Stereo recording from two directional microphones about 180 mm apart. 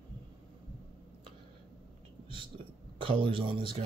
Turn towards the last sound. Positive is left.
turn(degrees=-30)  # may be behind; listen again after turning